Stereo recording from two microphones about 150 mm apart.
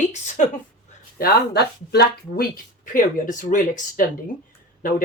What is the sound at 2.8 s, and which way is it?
Speech, 60° left (ahead or behind).